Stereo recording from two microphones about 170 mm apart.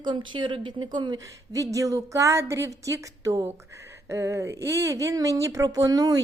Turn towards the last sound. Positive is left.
turn(degrees=-20)  # may be behind; listen again after turning